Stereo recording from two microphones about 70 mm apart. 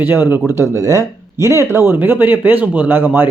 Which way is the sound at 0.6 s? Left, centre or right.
Right.